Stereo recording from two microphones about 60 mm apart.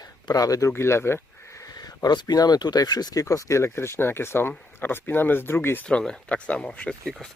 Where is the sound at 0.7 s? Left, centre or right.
Left.